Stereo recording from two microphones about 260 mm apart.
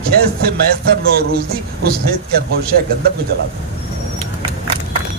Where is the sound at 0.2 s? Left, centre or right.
Right.